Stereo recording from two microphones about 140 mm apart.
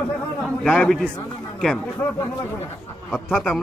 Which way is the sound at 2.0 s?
15° left (ahead or behind).